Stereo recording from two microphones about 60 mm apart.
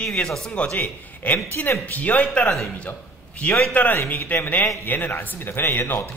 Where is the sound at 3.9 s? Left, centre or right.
Left.